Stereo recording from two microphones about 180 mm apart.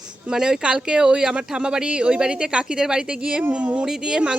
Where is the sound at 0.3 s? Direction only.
5° right (ahead or behind).